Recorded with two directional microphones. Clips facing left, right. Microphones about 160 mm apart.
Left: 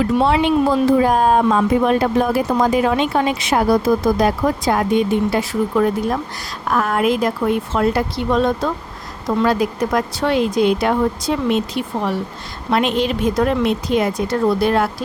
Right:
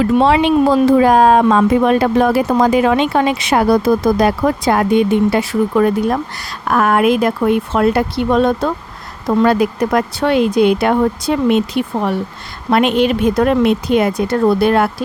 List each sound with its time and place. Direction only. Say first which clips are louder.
0.2 s speech: right 4 dB; 90° right; by 14.8 s 60° right (ahead or behind)